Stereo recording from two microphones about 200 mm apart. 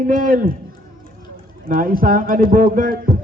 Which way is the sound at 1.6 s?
45° right (ahead or behind).